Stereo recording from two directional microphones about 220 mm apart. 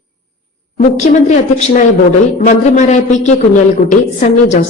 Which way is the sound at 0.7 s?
30° left (ahead or behind).